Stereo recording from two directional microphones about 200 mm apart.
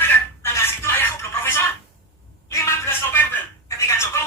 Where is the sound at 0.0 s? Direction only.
10° left (ahead or behind).